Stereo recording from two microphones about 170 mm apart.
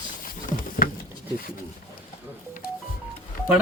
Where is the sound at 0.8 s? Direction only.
55° left (ahead or behind).